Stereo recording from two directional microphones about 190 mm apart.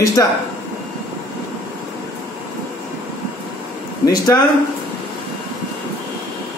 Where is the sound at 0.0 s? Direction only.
15° left (ahead or behind).